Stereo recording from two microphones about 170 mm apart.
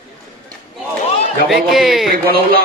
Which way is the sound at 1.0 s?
35° left (ahead or behind).